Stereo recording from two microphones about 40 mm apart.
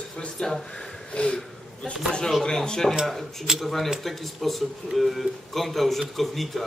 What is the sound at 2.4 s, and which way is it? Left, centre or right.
A man's voice, centre.